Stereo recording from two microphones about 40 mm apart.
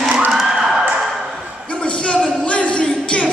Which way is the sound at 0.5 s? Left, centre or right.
Centre.